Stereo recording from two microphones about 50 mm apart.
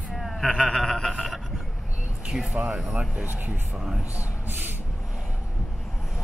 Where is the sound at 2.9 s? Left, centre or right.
Right.